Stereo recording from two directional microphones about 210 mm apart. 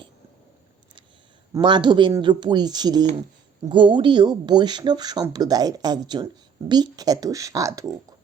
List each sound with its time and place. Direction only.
1.5 s speech: 20° right (ahead or behind)